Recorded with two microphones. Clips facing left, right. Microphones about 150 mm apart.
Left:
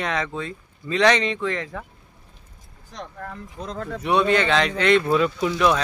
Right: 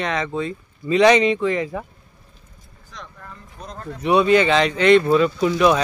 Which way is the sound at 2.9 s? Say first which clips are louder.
Left 5 dB; 55° left (ahead or behind).